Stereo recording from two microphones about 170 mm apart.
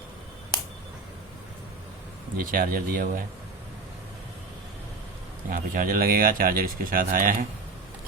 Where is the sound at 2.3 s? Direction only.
55° right (ahead or behind).